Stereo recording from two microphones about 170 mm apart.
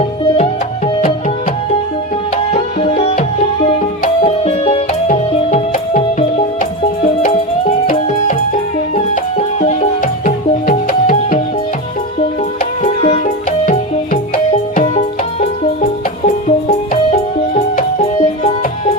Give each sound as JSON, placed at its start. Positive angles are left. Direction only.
{"t": 2.5, "sound": "music", "side_deg": 40}
{"t": 4.3, "sound": "music", "side_deg": 40}
{"t": 9.6, "sound": "music", "side_deg": 40}
{"t": 12.8, "sound": "music", "side_deg": 40}
{"t": 13.7, "sound": "music", "side_deg": 50}
{"t": 18.0, "sound": "music", "side_deg": 35}